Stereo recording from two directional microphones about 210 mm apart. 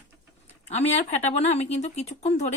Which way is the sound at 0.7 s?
30° left (ahead or behind).